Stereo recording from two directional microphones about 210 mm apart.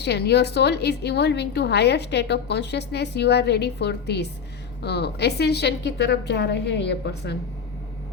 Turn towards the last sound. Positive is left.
turn(degrees=55)  # may be behind; listen again after turning